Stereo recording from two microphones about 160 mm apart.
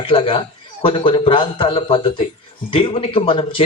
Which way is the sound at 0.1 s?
35° left (ahead or behind).